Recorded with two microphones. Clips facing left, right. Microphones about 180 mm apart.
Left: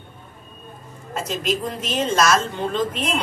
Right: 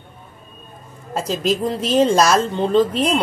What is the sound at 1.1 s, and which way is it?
A woman's voice, 35° right (ahead or behind).